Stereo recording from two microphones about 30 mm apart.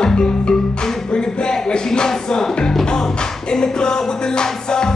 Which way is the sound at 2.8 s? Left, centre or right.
Left.